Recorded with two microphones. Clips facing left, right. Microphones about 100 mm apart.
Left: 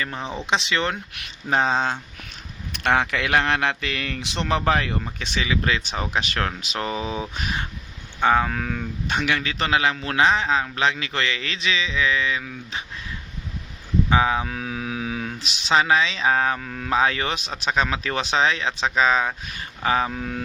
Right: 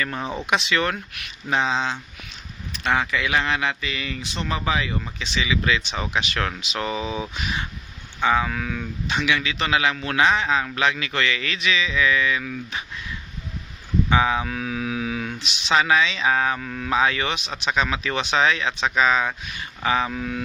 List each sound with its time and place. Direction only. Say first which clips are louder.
0.2 s speech: right 2 dB; 5° right (ahead or behind)
0.4 s speech: right 1 dB; 25° left (ahead or behind); by 2.0 s 45° left (ahead or behind)
2.7 s speech: left 2 dB; 60° left (ahead or behind)
5.2 s speech: right 1 dB; 45° left (ahead or behind)
7.4 s speech: even; 50° left (ahead or behind); by 12.8 s 25° left (ahead or behind)
14.1 s speech: even; 30° left (ahead or behind)